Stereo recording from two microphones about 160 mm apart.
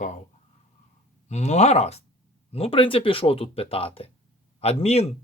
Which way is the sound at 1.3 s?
45° left (ahead or behind).